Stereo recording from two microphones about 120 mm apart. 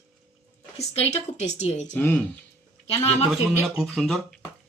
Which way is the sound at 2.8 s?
60° left (ahead or behind).